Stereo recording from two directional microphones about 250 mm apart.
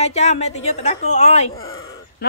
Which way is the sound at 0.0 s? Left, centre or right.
Left.